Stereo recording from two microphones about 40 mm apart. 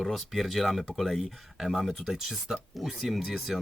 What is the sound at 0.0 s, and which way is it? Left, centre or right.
Speech, centre.